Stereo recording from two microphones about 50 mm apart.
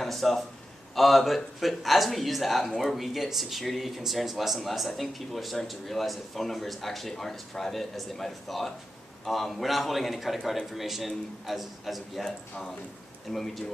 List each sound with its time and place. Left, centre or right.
0.0 s a sound: centre
0.9 s speech: centre
13.3 s speech: centre